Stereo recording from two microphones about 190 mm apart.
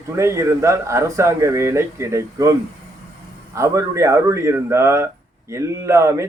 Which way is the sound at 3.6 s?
15° right (ahead or behind).